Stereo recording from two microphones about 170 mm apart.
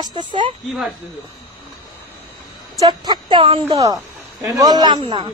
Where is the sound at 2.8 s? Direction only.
25° right (ahead or behind).